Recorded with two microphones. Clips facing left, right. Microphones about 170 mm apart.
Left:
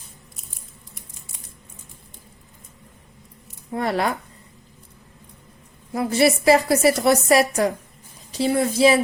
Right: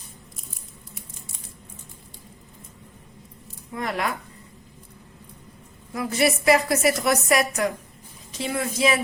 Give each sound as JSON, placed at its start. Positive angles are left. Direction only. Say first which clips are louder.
{"t": 3.7, "sound": "a woman's voice", "louder": "left 5 dB", "side_deg": 35}
{"t": 5.9, "sound": "a woman's voice", "louder": "left 4 dB", "side_deg": 30}